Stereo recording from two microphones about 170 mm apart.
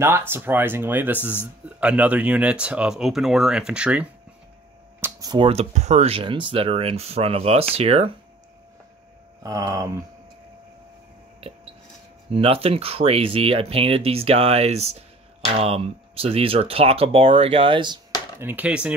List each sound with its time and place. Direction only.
0.0 s speech: 15° right (ahead or behind)
5.0 s speech: 25° right (ahead or behind)
9.4 s speech: 20° right (ahead or behind)
12.3 s speech: 35° right (ahead or behind)
18.4 s speech: 10° right (ahead or behind)